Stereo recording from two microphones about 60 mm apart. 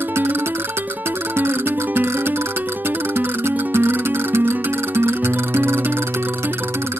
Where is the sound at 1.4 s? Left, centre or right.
Right.